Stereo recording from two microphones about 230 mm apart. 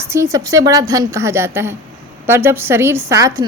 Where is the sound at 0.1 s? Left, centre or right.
Centre.